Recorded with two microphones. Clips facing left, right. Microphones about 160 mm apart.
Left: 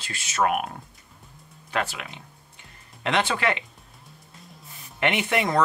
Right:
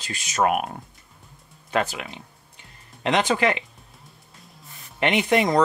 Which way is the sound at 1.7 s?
20° right (ahead or behind).